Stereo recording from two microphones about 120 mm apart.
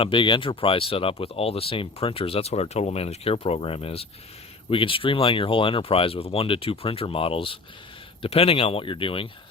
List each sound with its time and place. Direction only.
0.0 s speech: 45° left (ahead or behind)